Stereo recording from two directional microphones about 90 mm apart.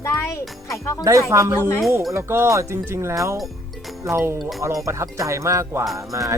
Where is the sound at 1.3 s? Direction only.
35° right (ahead or behind).